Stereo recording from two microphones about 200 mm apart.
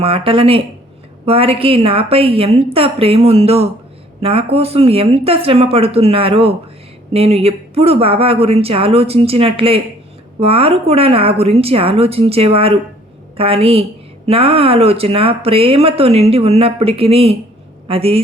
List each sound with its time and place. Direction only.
0.0 s speech: 30° right (ahead or behind)